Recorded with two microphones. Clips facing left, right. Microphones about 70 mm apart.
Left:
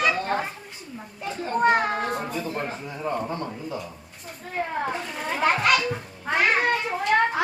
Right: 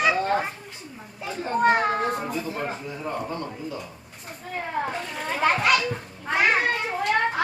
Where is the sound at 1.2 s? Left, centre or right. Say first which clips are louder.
Even; centre.